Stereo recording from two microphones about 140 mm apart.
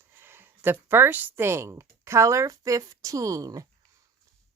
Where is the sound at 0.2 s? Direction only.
15° right (ahead or behind).